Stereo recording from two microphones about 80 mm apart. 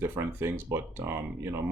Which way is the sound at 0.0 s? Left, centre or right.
Right.